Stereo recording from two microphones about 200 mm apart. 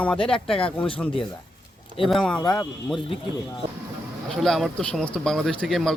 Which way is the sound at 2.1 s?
5° left (ahead or behind).